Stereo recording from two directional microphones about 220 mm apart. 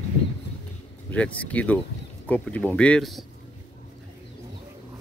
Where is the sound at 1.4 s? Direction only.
5° left (ahead or behind).